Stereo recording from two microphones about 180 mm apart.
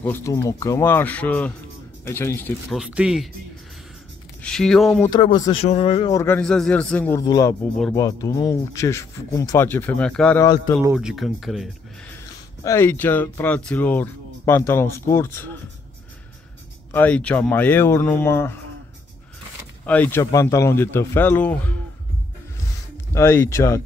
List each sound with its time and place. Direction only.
0.0 s speech: 15° left (ahead or behind)
2.7 s speech: 5° right (ahead or behind)
4.4 s speech: 5° left (ahead or behind)
5.2 s speech: 25° left (ahead or behind)
6.1 s speech: 10° left (ahead or behind)
12.6 s speech: 15° left (ahead or behind)
16.9 s speech: 10° left (ahead or behind)
19.9 s speech: 10° left (ahead or behind)
23.1 s speech: 15° left (ahead or behind)